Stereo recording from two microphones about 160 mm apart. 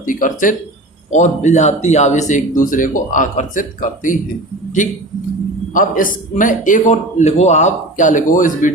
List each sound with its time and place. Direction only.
0.0 s speech: 55° left (ahead or behind)